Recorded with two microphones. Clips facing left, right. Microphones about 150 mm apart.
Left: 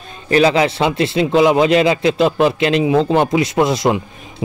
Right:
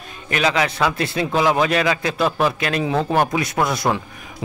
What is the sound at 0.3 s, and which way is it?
A man's voice, 30° left (ahead or behind).